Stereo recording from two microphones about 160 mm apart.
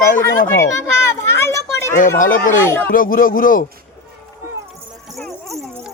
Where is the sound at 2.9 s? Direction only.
60° left (ahead or behind).